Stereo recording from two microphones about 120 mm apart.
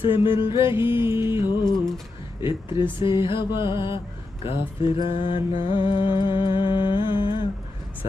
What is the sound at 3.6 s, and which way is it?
Music, 40° left (ahead or behind).